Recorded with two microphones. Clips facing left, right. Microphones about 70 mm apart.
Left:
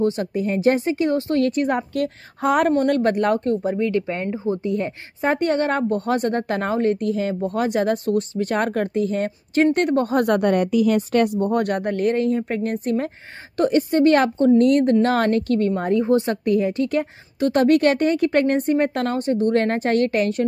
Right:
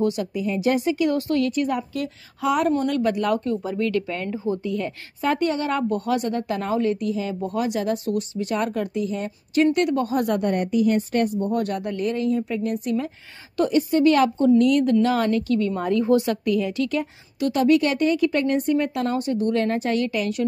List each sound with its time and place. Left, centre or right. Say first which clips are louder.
0.0 s a woman's voice: left 2 dB; left
1.4 s speech: left 3 dB; left
3.7 s a woman's voice: left 2 dB; left
15.9 s a woman's voice: even; left
16.9 s speech: left 3 dB; left